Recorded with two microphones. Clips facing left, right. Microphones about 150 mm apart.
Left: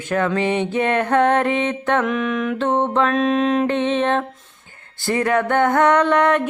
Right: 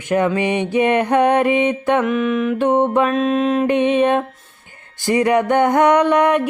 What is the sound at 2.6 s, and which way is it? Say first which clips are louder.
Music: right 3 dB; 15° right (ahead or behind).